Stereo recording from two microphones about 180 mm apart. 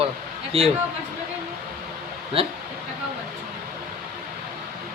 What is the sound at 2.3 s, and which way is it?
Speech, 30° right (ahead or behind).